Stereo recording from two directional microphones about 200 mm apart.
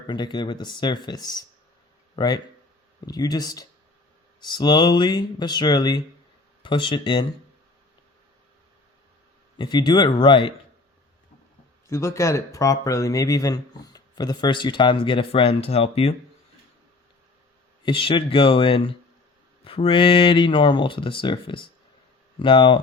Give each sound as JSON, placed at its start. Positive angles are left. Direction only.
{"t": 0.1, "sound": "speech", "side_deg": 20}
{"t": 9.6, "sound": "speech", "side_deg": 20}
{"t": 11.9, "sound": "speech", "side_deg": 15}
{"t": 17.8, "sound": "speech", "side_deg": 25}